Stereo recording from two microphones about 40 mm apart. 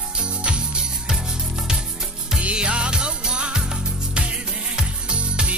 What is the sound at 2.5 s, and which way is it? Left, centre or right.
Music, right.